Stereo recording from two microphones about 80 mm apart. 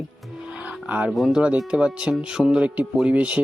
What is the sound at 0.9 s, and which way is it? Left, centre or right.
Speech, centre.